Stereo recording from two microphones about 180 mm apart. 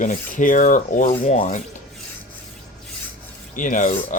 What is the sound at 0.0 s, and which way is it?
Speech, 45° left (ahead or behind).